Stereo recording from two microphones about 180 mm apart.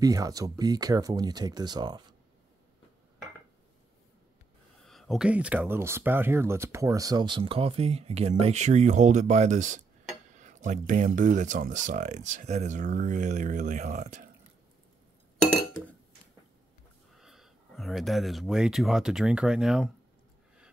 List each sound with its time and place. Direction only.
0.0 s speech: 20° right (ahead or behind)
4.8 s speech: centre (ahead or behind); by 14.3 s 40° right (ahead or behind)
17.2 s speech: centre (ahead or behind)